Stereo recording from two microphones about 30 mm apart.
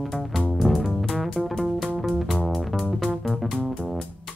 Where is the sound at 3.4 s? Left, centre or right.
Centre.